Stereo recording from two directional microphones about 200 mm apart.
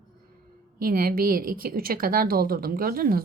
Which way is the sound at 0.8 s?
45° right (ahead or behind).